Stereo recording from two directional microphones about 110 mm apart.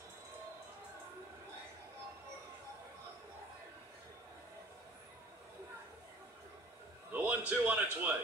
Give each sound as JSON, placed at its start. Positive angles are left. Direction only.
{"t": 7.1, "sound": "a man's voice", "side_deg": -15}